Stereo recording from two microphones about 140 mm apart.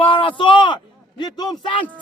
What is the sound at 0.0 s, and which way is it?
Speech, 40° left (ahead or behind).